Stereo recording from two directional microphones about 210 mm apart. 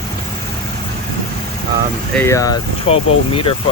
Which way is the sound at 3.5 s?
25° left (ahead or behind).